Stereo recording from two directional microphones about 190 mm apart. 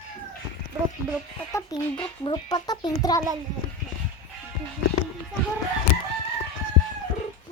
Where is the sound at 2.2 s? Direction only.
20° left (ahead or behind).